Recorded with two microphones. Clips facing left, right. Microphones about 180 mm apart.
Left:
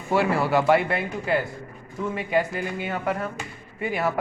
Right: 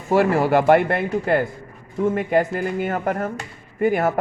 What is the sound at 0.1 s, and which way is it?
A man's voice, 45° right (ahead or behind).